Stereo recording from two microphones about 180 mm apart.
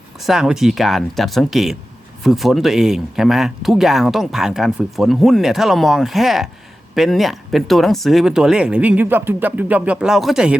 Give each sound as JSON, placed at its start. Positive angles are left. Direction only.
{"t": 0.2, "sound": "speech", "side_deg": 0}